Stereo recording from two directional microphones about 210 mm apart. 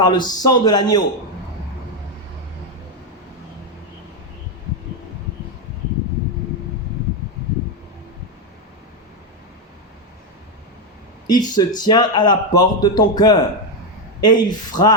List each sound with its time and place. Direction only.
0.0 s a man's voice: 20° left (ahead or behind)
11.3 s a man's voice: 20° left (ahead or behind)